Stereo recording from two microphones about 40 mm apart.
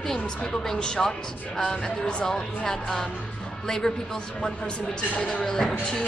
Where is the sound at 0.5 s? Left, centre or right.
Centre.